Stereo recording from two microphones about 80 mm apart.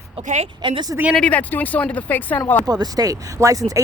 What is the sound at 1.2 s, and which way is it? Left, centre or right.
Speech, left.